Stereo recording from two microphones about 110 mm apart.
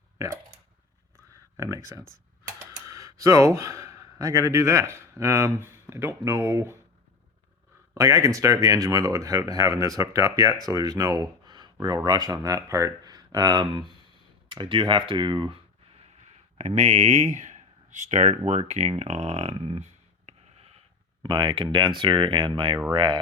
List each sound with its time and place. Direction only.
1.5 s speech: 25° right (ahead or behind)
7.9 s speech: 30° right (ahead or behind); by 16.0 s 55° right (ahead or behind)
16.6 s speech: 90° right; by 19.8 s 55° right (ahead or behind)
19.8 s a sound: 70° right (ahead or behind)
21.2 s speech: 45° right (ahead or behind)